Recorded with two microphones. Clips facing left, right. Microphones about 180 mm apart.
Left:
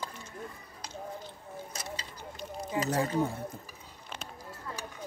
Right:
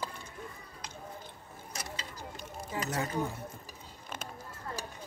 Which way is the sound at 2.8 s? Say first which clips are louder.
Left 5 dB; 30° left (ahead or behind).